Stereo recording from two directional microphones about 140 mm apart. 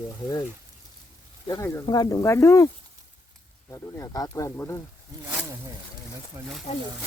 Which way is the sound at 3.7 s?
25° left (ahead or behind).